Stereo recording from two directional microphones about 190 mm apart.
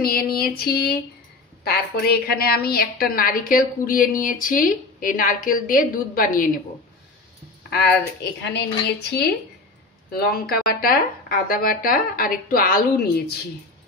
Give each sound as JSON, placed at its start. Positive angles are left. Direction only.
{"t": 0.0, "sound": "a woman's voice", "side_deg": 50}
{"t": 7.7, "sound": "speech", "side_deg": 60}
{"t": 10.1, "sound": "a woman's voice", "side_deg": 50}